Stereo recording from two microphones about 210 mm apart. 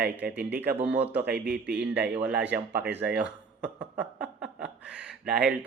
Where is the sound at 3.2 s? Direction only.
5° right (ahead or behind).